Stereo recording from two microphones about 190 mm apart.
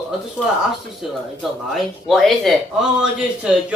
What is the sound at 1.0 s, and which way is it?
Speech, 5° right (ahead or behind).